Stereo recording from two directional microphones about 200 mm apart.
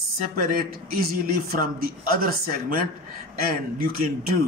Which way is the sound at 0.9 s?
45° right (ahead or behind).